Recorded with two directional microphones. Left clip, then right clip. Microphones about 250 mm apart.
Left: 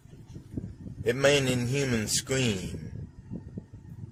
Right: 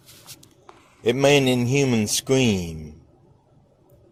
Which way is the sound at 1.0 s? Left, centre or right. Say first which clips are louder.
Right 6 dB; right.